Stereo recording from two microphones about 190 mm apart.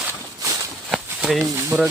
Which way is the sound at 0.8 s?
Centre (ahead or behind).